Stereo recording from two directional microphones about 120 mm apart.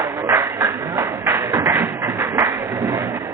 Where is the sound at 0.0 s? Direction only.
20° right (ahead or behind).